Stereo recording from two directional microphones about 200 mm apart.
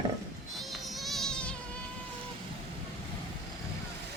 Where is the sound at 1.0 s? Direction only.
Centre (ahead or behind).